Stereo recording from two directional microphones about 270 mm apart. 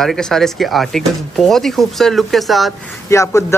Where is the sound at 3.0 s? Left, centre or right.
Centre.